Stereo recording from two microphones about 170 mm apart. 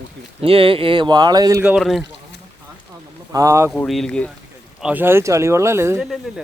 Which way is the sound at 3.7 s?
Centre (ahead or behind).